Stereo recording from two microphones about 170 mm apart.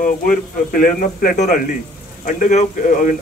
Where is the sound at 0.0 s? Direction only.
55° left (ahead or behind).